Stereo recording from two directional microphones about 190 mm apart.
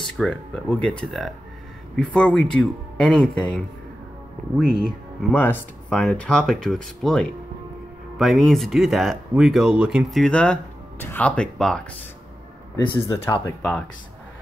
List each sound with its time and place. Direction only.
0.2 s speech: 5° left (ahead or behind)
5.3 s speech: 10° left (ahead or behind)
12.7 s speech: 25° left (ahead or behind)
13.6 s speech: 5° left (ahead or behind)